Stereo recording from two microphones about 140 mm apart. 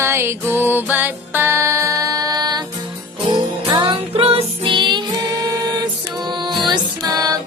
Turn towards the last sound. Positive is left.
turn(degrees=-30)  # may be behind; listen again after turning